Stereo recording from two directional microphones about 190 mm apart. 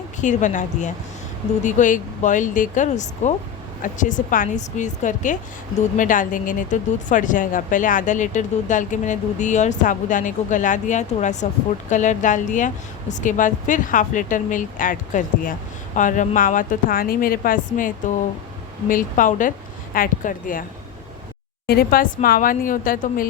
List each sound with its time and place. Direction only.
0.2 s a woman's voice: 40° left (ahead or behind)
21.7 s a woman's voice: 50° left (ahead or behind)